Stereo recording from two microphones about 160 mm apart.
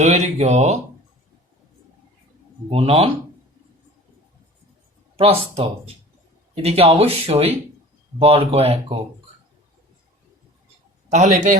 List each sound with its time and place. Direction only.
0.0 s speech: 45° right (ahead or behind)
2.6 s speech: 40° right (ahead or behind)
5.1 s speech: 35° right (ahead or behind)
11.1 s speech: 50° right (ahead or behind)